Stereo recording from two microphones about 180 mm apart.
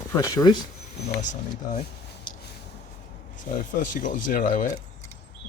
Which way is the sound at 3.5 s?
50° left (ahead or behind).